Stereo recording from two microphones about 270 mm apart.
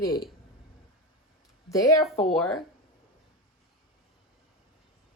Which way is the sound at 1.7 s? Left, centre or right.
Centre.